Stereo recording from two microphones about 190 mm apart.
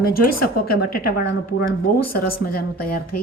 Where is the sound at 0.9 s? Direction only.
50° left (ahead or behind).